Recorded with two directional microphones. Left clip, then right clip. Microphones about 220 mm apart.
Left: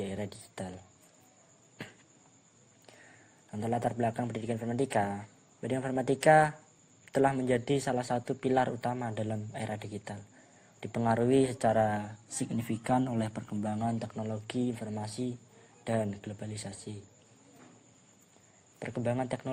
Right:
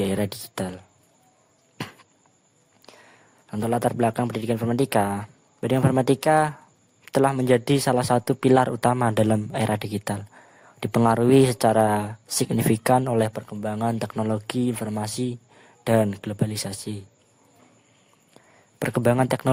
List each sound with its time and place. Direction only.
0.0 s speech: 45° right (ahead or behind)
1.8 s insect: 45° right (ahead or behind)
3.5 s speech: 40° right (ahead or behind)
18.8 s speech: 45° right (ahead or behind)